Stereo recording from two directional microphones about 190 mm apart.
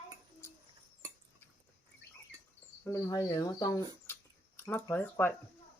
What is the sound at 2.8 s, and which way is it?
Speech, 15° left (ahead or behind).